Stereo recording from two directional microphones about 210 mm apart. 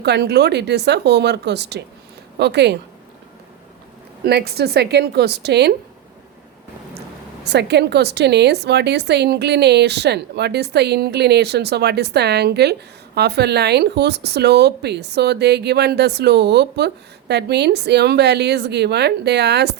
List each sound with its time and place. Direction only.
0.0 s speech: 50° right (ahead or behind)
4.2 s speech: 50° right (ahead or behind)
7.4 s speech: 55° right (ahead or behind)